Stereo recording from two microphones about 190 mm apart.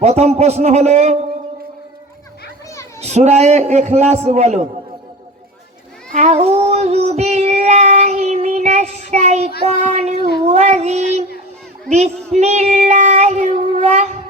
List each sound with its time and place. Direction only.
0.0 s a man's voice: 35° right (ahead or behind)
3.0 s a man's voice: 35° right (ahead or behind)
6.1 s child singing: 35° right (ahead or behind)
9.6 s a man's voice: 35° right (ahead or behind)
10.4 s child singing: 35° right (ahead or behind)